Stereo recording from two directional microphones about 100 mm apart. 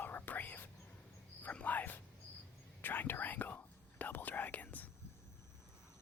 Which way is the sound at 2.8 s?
20° left (ahead or behind).